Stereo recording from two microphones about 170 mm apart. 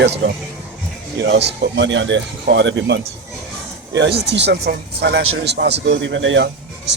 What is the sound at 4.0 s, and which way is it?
Speech, 75° right (ahead or behind).